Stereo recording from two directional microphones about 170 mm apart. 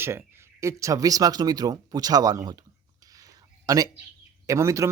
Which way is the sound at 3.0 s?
20° right (ahead or behind).